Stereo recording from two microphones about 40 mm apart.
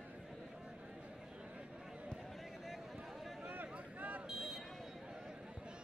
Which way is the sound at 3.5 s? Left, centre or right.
Right.